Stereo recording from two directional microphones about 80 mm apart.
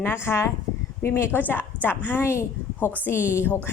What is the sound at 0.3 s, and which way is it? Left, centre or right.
A woman's voice, left.